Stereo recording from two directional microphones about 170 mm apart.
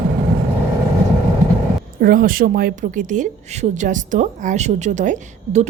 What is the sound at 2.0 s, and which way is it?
Speech, 55° right (ahead or behind).